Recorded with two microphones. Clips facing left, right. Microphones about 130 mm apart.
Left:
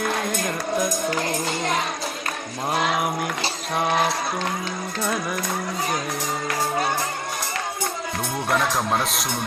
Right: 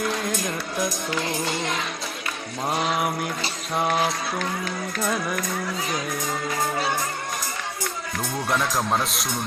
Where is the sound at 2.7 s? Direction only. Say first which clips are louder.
Left 2 dB; 60° left (ahead or behind).